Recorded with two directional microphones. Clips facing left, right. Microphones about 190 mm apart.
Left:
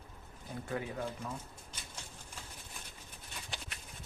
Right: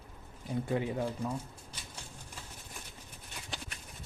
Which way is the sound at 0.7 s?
25° right (ahead or behind).